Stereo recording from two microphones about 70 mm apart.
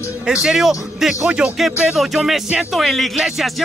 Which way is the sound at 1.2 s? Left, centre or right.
Centre.